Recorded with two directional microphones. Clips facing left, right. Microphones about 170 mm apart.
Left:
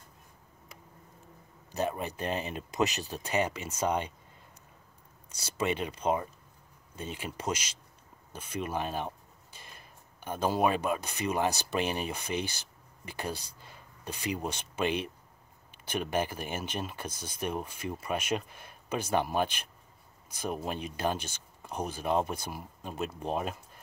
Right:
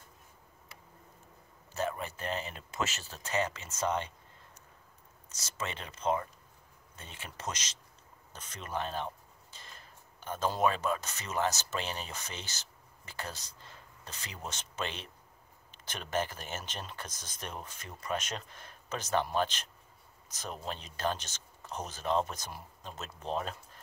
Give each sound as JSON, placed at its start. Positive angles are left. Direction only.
{"t": 1.7, "sound": "speech", "side_deg": 20}
{"t": 5.3, "sound": "speech", "side_deg": 10}